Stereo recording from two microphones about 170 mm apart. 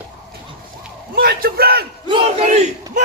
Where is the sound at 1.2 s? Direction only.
65° right (ahead or behind).